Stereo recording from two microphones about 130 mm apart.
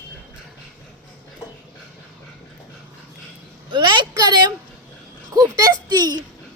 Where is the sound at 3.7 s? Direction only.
35° right (ahead or behind).